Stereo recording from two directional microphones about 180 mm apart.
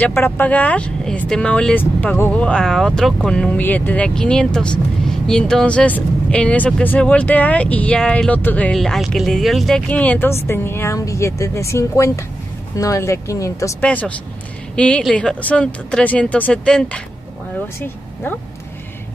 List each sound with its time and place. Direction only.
0.0 s speech: 10° left (ahead or behind)